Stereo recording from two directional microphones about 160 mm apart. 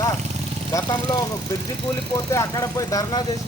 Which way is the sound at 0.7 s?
20° left (ahead or behind).